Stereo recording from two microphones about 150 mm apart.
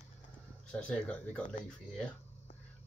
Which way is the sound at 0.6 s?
5° left (ahead or behind).